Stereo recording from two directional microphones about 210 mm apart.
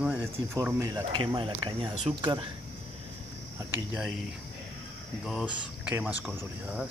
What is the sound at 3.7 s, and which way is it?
Speech, 10° right (ahead or behind).